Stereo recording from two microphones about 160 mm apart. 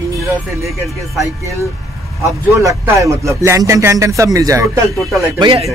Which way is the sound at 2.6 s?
20° right (ahead or behind).